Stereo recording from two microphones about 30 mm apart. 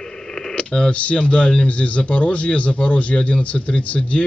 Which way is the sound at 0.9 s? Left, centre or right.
Left.